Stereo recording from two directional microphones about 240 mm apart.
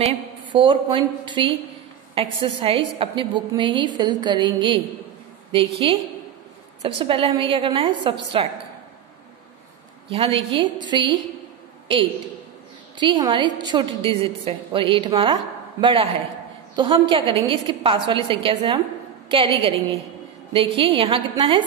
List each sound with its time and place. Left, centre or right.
0.0 s a woman's voice: right
5.8 s a woman's voice: right
10.0 s a woman's voice: right
12.9 s a woman's voice: centre